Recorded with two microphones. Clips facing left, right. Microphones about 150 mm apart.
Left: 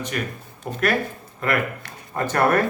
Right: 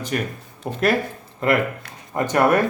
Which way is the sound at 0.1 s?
35° right (ahead or behind).